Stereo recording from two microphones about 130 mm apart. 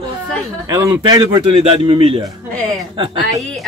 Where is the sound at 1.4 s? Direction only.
50° right (ahead or behind).